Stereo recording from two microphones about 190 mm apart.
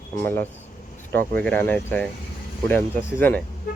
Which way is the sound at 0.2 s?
10° left (ahead or behind).